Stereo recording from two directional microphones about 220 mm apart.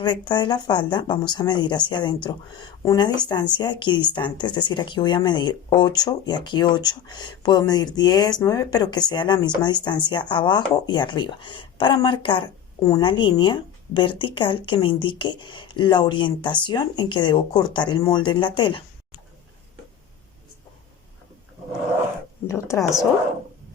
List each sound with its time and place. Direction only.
0.0 s a woman's voice: 20° left (ahead or behind)
22.4 s speech: 15° left (ahead or behind)